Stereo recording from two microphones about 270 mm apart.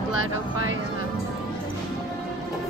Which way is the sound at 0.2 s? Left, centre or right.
Right.